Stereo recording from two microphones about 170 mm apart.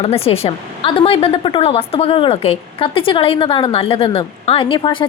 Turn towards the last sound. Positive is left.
turn(degrees=30)  # may be behind; listen again after turning